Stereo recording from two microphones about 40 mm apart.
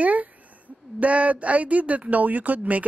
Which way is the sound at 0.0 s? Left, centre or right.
Right.